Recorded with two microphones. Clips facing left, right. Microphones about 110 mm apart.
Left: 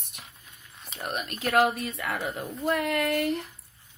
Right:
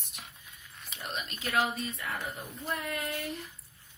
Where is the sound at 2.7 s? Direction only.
75° left (ahead or behind).